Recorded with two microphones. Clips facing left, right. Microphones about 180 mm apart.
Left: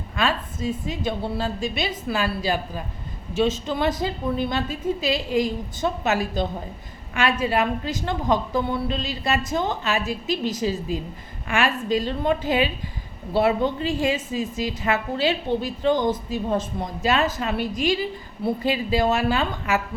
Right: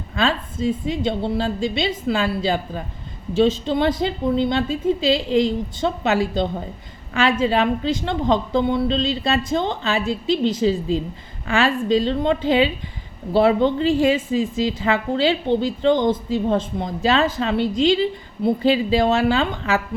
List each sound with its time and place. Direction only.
0.2 s a woman's voice: 25° right (ahead or behind)
13.8 s a woman's voice: 30° right (ahead or behind)